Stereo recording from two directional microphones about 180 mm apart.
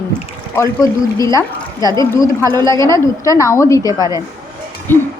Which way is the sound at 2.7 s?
15° left (ahead or behind).